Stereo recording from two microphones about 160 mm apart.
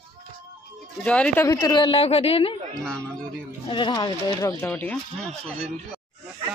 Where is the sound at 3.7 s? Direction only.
30° left (ahead or behind).